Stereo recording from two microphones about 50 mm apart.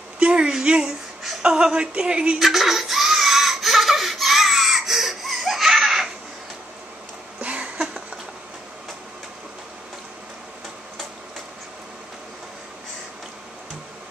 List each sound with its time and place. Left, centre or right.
0.2 s a woman's voice: centre
2.3 s laughter: centre
7.3 s a sound: right